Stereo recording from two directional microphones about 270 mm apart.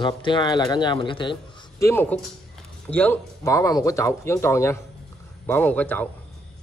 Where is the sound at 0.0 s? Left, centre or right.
Centre.